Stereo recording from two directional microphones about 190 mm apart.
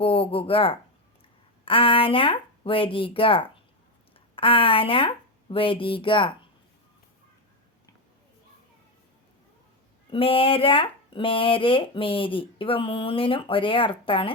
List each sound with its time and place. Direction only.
0.0 s speech: 30° left (ahead or behind)
10.1 s speech: 30° left (ahead or behind)